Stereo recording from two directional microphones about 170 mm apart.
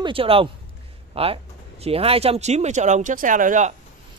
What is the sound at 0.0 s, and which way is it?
Speech, 30° right (ahead or behind).